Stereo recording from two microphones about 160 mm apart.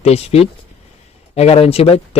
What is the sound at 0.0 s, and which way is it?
Speech, 40° left (ahead or behind).